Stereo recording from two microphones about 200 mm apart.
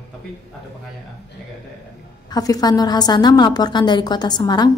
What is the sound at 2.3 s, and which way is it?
A woman's voice, 20° left (ahead or behind).